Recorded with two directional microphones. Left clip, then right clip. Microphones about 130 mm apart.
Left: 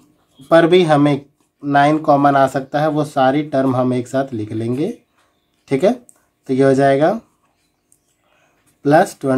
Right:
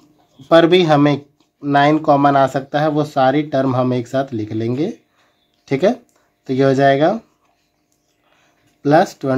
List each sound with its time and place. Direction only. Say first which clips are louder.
0.5 s speech: even; 20° right (ahead or behind)
8.8 s speech: left 1 dB; 20° right (ahead or behind)